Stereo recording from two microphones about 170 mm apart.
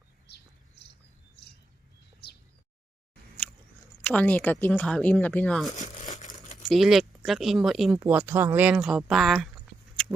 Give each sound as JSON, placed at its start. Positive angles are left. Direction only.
{"t": 2.2, "sound": "a sound", "side_deg": 70}
{"t": 4.0, "sound": "speech", "side_deg": 10}
{"t": 5.7, "sound": "crumpling", "side_deg": 50}
{"t": 6.7, "sound": "speech", "side_deg": 0}